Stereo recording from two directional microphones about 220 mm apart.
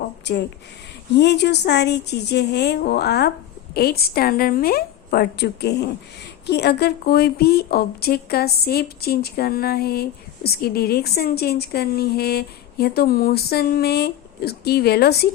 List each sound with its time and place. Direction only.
0.3 s speech: 50° left (ahead or behind)